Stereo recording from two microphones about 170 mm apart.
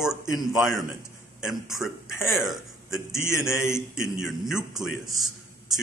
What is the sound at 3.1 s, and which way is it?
Speech, 15° left (ahead or behind).